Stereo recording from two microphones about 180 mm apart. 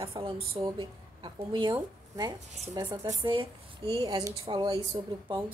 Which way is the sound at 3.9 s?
25° right (ahead or behind).